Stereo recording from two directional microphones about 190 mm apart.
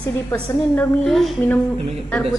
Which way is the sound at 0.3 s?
5° left (ahead or behind).